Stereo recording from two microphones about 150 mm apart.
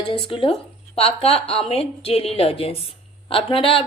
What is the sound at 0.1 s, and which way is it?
A woman's voice, 35° left (ahead or behind).